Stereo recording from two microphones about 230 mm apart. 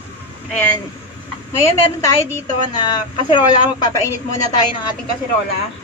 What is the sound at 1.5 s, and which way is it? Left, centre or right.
Speech, centre.